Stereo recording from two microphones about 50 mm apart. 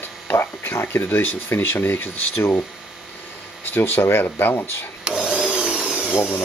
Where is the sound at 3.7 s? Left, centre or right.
Left.